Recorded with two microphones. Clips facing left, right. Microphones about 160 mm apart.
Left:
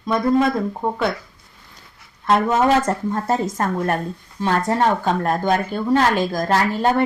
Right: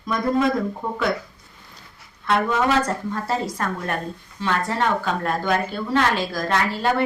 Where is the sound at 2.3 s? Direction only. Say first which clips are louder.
Left 4 dB; 45° left (ahead or behind).